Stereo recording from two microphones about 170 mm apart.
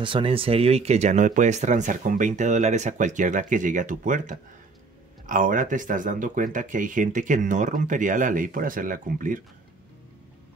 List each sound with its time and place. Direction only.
0.0 s speech: 30° right (ahead or behind); by 9.4 s 50° right (ahead or behind)